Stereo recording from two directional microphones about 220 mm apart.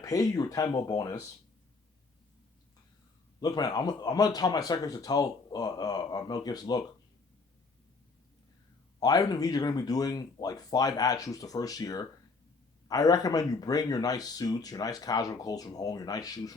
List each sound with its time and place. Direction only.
0.0 s speech: 15° left (ahead or behind)
3.4 s speech: 15° left (ahead or behind)
9.0 s speech: 15° left (ahead or behind)